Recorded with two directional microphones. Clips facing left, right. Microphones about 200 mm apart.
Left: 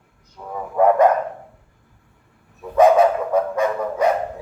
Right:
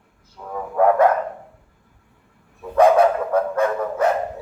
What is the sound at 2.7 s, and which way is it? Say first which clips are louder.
Dog: left 1 dB; 5° left (ahead or behind).